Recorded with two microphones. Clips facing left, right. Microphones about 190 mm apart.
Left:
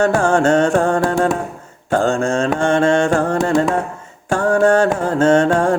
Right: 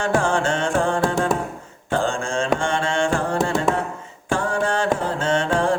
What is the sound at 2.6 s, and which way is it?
Carnatic music, 45° left (ahead or behind).